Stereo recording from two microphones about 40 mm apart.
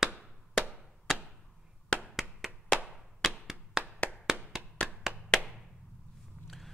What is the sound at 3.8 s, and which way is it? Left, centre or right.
Clapping, centre.